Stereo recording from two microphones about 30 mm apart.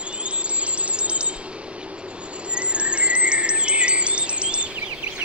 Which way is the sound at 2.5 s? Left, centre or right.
Right.